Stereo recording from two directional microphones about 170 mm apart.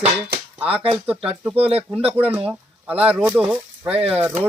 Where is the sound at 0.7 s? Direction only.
35° right (ahead or behind).